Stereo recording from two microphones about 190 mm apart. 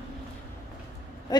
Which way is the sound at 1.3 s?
20° left (ahead or behind).